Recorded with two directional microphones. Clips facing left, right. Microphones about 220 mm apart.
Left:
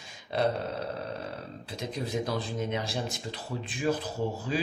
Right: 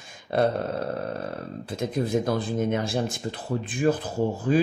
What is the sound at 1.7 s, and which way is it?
Speech, 50° right (ahead or behind).